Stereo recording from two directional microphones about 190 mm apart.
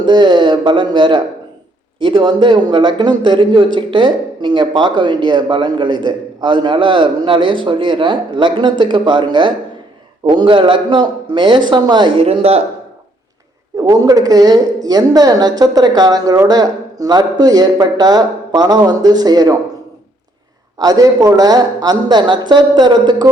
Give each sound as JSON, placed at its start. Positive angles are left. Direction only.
{"t": 0.0, "sound": "speech", "side_deg": -25}
{"t": 13.7, "sound": "speech", "side_deg": -20}
{"t": 20.7, "sound": "speech", "side_deg": -20}